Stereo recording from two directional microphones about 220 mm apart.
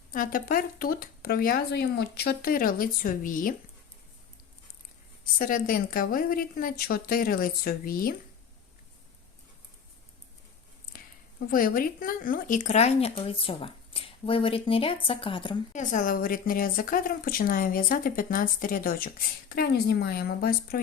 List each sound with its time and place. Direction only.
0.1 s speech: 40° left (ahead or behind)
5.2 s speech: 40° left (ahead or behind)
10.9 s speech: 40° left (ahead or behind); by 15.5 s 20° left (ahead or behind)
15.7 s speech: 35° left (ahead or behind)